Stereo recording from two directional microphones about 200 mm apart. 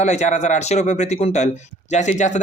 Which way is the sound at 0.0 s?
35° left (ahead or behind).